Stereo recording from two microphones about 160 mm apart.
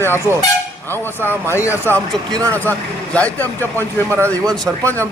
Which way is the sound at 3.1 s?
10° left (ahead or behind).